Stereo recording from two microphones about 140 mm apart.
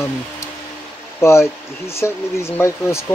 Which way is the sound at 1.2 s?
20° left (ahead or behind).